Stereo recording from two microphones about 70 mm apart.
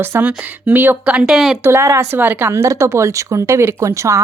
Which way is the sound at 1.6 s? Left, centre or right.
Right.